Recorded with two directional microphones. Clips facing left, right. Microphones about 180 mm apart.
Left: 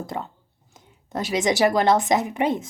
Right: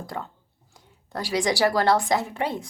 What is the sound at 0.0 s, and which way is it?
A woman's voice, 20° left (ahead or behind).